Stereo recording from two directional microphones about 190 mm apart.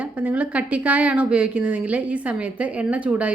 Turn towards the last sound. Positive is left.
turn(degrees=-5)  # may be behind; listen again after turning